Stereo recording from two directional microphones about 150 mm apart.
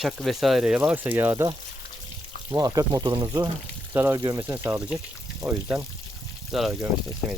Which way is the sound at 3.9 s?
15° right (ahead or behind).